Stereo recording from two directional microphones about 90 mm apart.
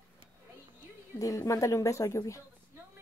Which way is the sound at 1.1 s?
35° left (ahead or behind).